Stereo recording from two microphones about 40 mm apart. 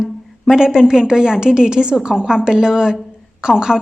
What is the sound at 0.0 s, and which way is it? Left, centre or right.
A woman's voice, centre.